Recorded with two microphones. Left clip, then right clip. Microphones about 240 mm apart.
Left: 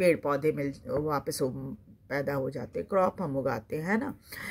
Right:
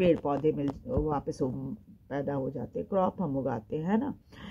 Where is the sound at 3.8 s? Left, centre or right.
Left.